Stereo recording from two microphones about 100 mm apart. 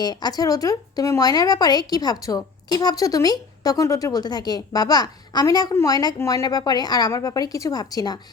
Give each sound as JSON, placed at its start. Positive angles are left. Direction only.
{"t": 0.0, "sound": "speech", "side_deg": 45}